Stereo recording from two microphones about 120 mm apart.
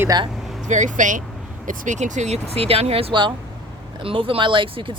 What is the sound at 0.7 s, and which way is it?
Speech, 90° right.